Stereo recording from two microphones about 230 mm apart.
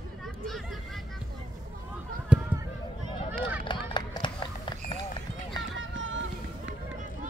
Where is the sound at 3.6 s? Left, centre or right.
Centre.